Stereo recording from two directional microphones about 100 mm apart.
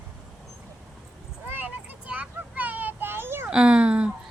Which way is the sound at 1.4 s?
20° right (ahead or behind).